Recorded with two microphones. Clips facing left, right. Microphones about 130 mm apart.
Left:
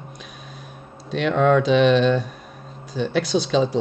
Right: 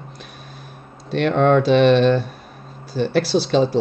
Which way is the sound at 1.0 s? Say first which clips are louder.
Right 2 dB; centre (ahead or behind).